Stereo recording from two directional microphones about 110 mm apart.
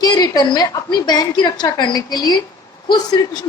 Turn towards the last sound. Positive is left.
turn(degrees=40)  # may be behind; listen again after turning